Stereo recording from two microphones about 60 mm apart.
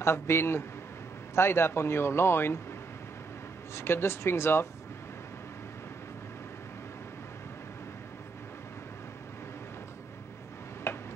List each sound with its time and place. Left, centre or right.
0.0 s speech: left
3.7 s speech: left
10.9 s tick-tock: left